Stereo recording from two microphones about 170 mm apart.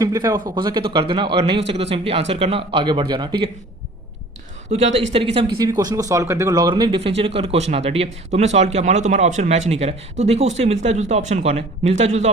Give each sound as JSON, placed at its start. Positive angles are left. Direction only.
{"t": 0.0, "sound": "speech", "side_deg": -20}
{"t": 4.7, "sound": "speech", "side_deg": -40}
{"t": 5.5, "sound": "speech", "side_deg": -20}